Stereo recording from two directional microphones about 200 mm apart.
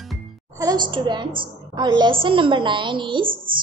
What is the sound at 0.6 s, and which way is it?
A woman's voice, 20° right (ahead or behind).